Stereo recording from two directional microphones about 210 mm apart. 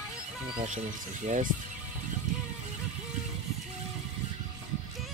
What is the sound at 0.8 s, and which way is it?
Speech, 35° right (ahead or behind).